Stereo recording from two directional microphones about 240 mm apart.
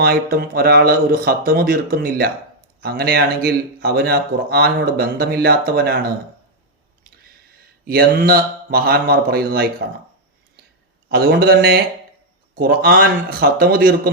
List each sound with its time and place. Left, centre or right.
0.0 s speech: right
7.9 s speech: right
11.1 s speech: right